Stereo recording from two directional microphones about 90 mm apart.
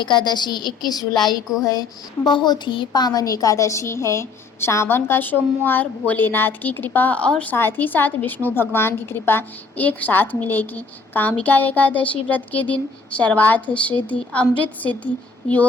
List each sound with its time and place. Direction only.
0.0 s a woman's voice: 55° left (ahead or behind)
2.2 s a woman's voice: 55° left (ahead or behind); by 7.5 s 15° left (ahead or behind)
7.5 s a woman's voice: 25° left (ahead or behind)